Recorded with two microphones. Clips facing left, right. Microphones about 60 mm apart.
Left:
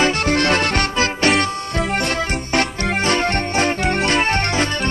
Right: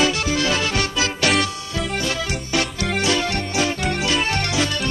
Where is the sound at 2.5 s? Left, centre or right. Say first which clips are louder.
Left 3 dB; left.